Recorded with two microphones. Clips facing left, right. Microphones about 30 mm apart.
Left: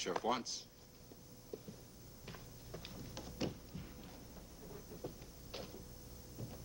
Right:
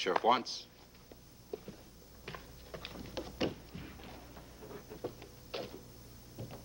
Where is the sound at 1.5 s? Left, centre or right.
Right.